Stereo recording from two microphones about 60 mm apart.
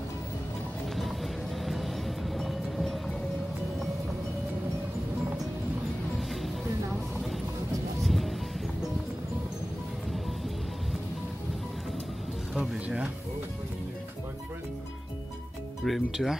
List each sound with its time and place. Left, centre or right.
1.6 s vehicle: centre
6.4 s music: centre
12.5 s music: centre
15.8 s speech: centre